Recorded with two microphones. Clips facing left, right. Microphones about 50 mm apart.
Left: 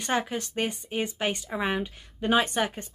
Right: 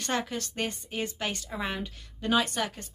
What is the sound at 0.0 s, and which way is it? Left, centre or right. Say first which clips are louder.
Speech: left 3 dB; centre.